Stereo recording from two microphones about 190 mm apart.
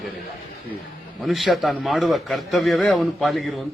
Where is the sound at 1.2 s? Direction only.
Centre (ahead or behind).